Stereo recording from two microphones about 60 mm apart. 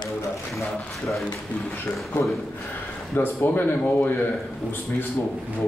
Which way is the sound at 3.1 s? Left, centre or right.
Left.